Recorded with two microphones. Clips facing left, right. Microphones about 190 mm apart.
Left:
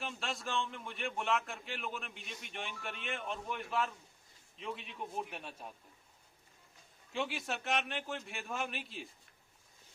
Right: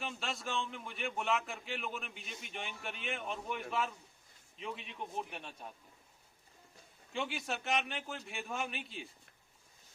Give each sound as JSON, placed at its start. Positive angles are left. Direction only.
{"t": 0.0, "sound": "a man's voice", "side_deg": 0}
{"t": 7.1, "sound": "a man's voice", "side_deg": 0}